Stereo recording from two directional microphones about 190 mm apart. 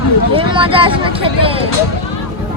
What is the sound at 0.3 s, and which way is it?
Speech, 25° right (ahead or behind).